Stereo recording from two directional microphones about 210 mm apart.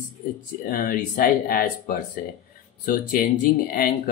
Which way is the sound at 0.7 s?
40° left (ahead or behind).